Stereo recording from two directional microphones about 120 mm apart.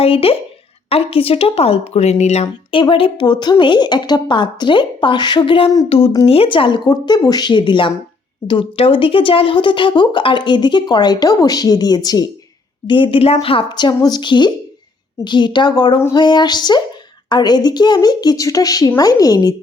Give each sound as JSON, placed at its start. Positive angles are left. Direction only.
{"t": 0.0, "sound": "speech", "side_deg": 50}
{"t": 2.7, "sound": "speech", "side_deg": 45}
{"t": 12.9, "sound": "speech", "side_deg": 45}